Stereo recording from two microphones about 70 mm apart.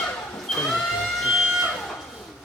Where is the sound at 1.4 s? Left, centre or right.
Centre.